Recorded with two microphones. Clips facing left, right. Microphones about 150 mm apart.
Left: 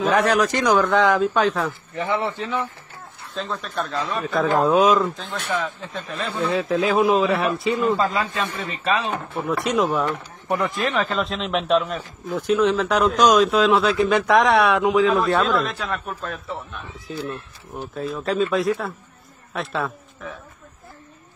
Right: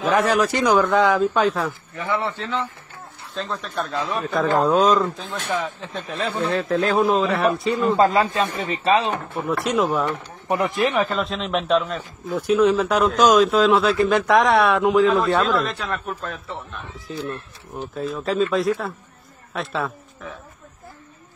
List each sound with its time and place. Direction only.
0.1 s speech: centre (ahead or behind)
2.0 s a man's voice: 20° left (ahead or behind)
3.3 s speech: centre (ahead or behind)
8.0 s speech: 40° right (ahead or behind)
9.2 s speech: centre (ahead or behind)
10.5 s a man's voice: 20° right (ahead or behind)
11.1 s speech: centre (ahead or behind)